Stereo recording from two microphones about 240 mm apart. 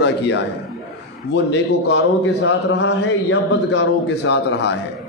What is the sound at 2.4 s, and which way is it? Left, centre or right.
A man's voice, left.